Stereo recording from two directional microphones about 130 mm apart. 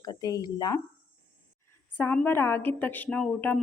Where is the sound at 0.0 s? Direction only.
30° left (ahead or behind).